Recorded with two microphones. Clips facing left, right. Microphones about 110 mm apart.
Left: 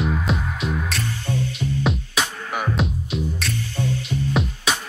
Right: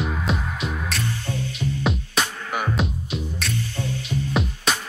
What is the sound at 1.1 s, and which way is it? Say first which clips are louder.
Music: left 2 dB; 15° left (ahead or behind).